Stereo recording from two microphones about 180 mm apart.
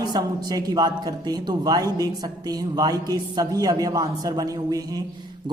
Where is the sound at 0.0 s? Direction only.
20° right (ahead or behind).